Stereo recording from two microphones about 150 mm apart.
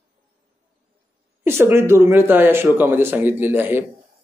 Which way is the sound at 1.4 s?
15° right (ahead or behind).